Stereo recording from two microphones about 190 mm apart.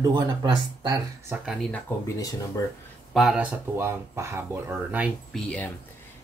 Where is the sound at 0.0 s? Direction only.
20° right (ahead or behind).